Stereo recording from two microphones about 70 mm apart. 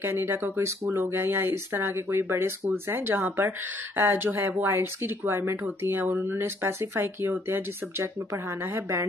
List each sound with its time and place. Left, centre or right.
0.0 s speech: right